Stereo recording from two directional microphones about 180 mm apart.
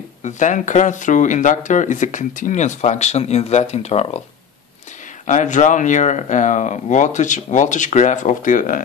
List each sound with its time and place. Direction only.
0.2 s speech: 45° left (ahead or behind)
5.2 s speech: 45° left (ahead or behind)